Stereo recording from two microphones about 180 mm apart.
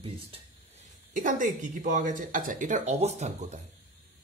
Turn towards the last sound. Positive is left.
turn(degrees=-40)  # may be behind; listen again after turning